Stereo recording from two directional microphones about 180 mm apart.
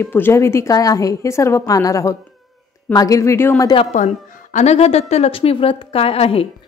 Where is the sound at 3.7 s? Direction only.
35° left (ahead or behind).